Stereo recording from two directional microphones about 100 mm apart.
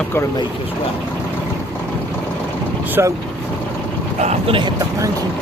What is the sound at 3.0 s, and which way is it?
Speech, 25° right (ahead or behind).